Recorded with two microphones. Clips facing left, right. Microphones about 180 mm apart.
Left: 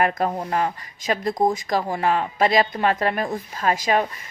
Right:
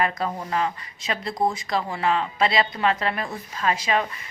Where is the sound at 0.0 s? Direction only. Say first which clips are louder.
Left 4 dB; 50° left (ahead or behind).